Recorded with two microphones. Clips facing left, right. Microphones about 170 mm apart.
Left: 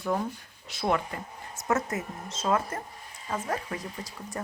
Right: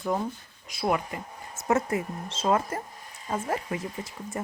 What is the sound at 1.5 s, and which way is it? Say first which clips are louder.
Speech: right 3 dB; 30° right (ahead or behind).